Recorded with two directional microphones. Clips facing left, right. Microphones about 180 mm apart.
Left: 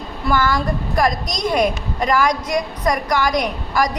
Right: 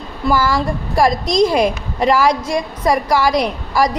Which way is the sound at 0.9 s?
30° right (ahead or behind).